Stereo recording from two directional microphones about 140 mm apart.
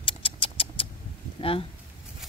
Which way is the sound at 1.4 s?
40° left (ahead or behind).